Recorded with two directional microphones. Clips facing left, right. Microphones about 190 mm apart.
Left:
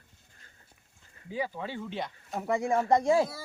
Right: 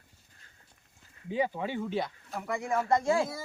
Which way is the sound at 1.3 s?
20° right (ahead or behind).